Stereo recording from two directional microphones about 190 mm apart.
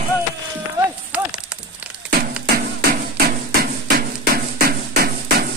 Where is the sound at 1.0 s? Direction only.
5° right (ahead or behind).